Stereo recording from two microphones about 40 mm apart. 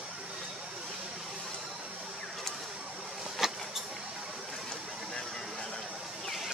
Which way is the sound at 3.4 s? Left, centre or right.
Centre.